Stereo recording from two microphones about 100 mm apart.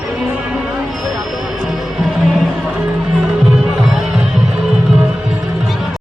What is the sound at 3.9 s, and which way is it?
Music, 5° right (ahead or behind).